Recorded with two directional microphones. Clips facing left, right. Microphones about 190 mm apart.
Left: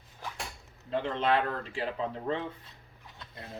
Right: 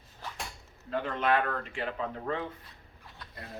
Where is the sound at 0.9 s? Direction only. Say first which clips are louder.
Even; 25° left (ahead or behind).